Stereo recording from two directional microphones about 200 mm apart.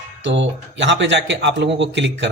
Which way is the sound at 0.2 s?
65° right (ahead or behind).